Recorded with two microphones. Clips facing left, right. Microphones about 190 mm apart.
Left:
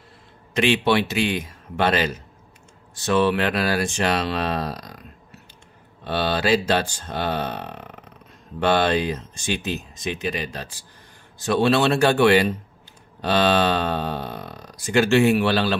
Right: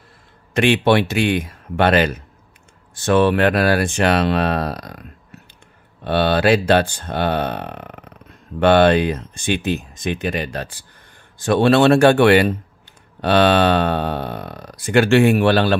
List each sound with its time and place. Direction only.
0.6 s speech: 55° right (ahead or behind)
6.0 s speech: 60° right (ahead or behind)